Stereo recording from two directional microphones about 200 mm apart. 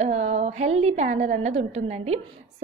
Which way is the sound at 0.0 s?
35° right (ahead or behind).